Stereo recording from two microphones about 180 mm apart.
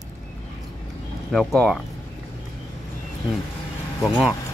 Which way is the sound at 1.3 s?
Centre (ahead or behind).